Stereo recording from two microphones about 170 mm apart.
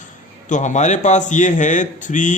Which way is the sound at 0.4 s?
45° left (ahead or behind).